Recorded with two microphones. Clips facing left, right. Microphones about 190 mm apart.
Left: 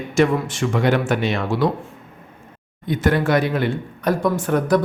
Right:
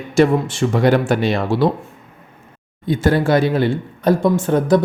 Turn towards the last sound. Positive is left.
turn(degrees=-25)  # may be behind; listen again after turning